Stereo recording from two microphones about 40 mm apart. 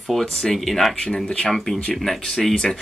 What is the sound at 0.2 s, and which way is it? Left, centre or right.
Speech, centre.